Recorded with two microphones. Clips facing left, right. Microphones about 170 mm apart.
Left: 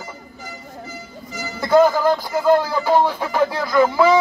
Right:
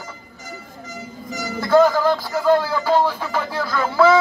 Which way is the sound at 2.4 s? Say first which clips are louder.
Left 1 dB; 15° left (ahead or behind).